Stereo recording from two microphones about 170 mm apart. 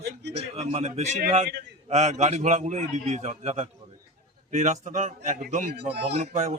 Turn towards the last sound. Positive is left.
turn(degrees=-40)  # may be behind; listen again after turning